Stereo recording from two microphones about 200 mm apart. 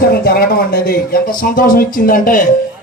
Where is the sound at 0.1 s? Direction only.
50° left (ahead or behind).